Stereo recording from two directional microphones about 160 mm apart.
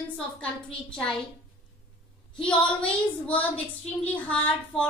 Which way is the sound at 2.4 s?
5° left (ahead or behind).